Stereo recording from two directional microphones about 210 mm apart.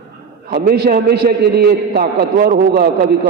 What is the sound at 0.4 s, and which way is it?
A man's voice, 45° right (ahead or behind).